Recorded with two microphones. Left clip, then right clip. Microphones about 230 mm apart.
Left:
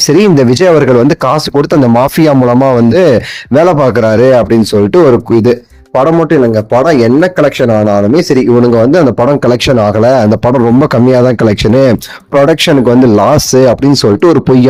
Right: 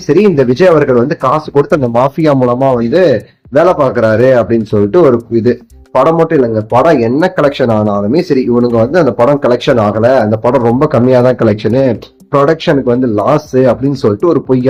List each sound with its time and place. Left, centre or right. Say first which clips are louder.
0.2 s speech: right 1 dB; left
6.0 s a man's voice: left 1 dB; left
8.6 s speech: left 3 dB; left